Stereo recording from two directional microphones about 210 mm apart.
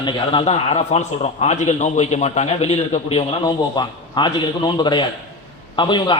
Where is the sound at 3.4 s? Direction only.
20° left (ahead or behind).